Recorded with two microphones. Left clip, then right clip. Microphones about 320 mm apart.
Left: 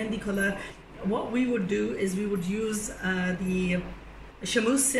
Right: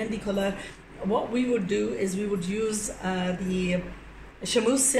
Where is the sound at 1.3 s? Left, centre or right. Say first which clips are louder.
Right 2 dB; centre.